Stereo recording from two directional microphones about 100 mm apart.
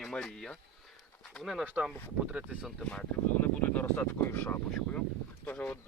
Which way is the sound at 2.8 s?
10° left (ahead or behind).